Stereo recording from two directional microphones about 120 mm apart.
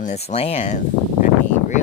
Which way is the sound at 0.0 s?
70° left (ahead or behind).